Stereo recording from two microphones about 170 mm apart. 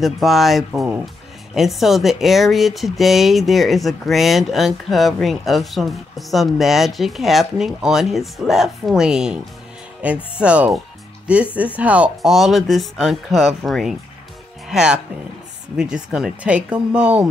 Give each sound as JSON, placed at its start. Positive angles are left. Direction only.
{"t": 0.0, "sound": "speech", "side_deg": 0}